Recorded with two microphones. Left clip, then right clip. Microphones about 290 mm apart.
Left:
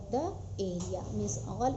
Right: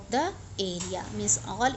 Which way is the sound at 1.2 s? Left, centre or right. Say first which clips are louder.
Right 8 dB; right.